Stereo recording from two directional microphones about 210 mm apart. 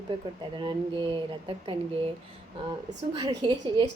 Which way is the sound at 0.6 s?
25° right (ahead or behind).